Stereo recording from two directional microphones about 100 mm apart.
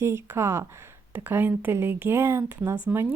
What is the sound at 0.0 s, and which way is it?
A woman's voice, 25° right (ahead or behind).